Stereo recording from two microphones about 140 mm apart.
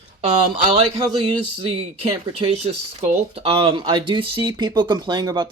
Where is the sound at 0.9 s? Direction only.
40° right (ahead or behind).